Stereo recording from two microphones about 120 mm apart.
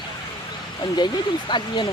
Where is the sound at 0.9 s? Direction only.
40° left (ahead or behind).